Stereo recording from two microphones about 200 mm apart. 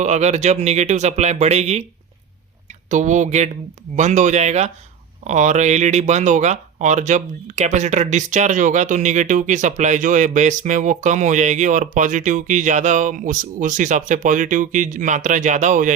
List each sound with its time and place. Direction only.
0.0 s speech: 35° right (ahead or behind)
2.9 s speech: 35° right (ahead or behind)